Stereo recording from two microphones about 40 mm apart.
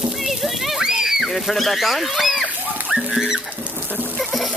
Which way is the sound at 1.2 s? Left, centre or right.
Centre.